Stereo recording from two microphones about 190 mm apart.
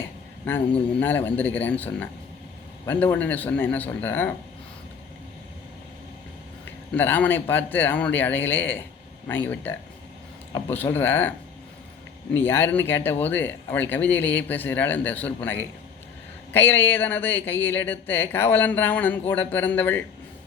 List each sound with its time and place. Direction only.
0.4 s speech: 10° left (ahead or behind)
6.7 s speech: 10° left (ahead or behind)